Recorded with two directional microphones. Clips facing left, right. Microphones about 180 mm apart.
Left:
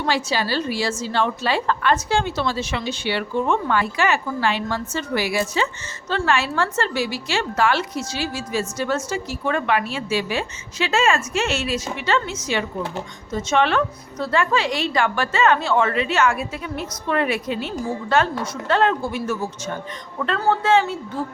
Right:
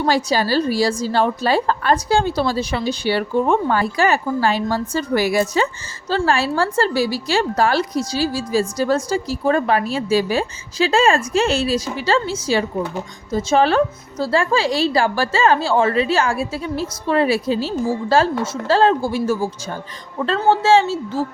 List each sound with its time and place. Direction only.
0.0 s a woman's voice: 40° right (ahead or behind)